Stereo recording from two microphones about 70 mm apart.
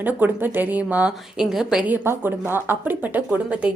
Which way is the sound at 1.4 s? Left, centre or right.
Centre.